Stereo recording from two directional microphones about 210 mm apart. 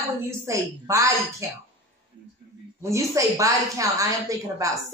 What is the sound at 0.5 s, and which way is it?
Speech, 15° right (ahead or behind).